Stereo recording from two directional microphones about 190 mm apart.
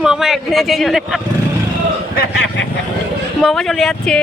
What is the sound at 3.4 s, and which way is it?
Speech, centre (ahead or behind).